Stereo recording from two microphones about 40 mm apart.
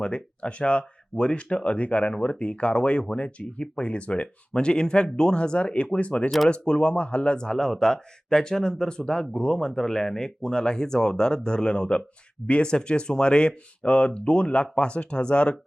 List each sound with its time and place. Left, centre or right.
0.0 s speech: left